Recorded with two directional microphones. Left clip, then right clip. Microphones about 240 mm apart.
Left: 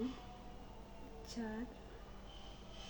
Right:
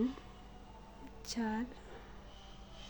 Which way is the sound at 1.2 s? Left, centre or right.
Right.